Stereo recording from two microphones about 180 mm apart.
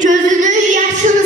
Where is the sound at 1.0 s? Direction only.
45° right (ahead or behind).